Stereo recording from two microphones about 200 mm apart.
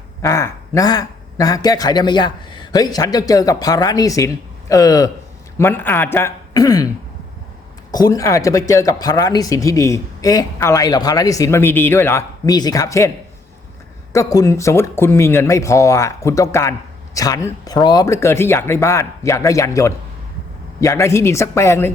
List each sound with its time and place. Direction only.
0.2 s speech: 15° left (ahead or behind)
14.1 s speech: 15° left (ahead or behind)